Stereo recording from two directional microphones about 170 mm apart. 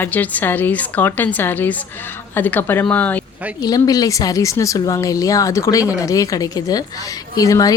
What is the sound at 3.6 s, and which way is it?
Speech, 20° left (ahead or behind).